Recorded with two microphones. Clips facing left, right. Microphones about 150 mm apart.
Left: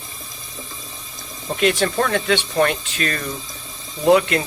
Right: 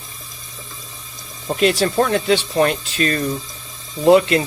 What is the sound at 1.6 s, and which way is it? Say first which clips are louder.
Speech: right 2 dB; 35° right (ahead or behind).